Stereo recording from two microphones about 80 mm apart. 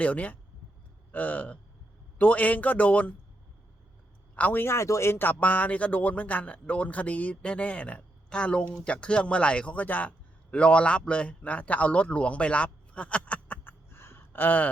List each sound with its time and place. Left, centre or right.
0.0 s a man's voice: centre
4.4 s speech: left
4.6 s speech: left; by 13.6 s centre
13.7 s a sound: left